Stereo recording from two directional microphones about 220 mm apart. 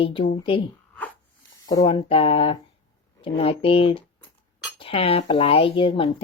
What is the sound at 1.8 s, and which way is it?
Speech, 25° left (ahead or behind).